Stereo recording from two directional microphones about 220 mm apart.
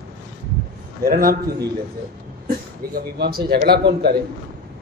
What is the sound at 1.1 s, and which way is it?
Speech, 40° right (ahead or behind).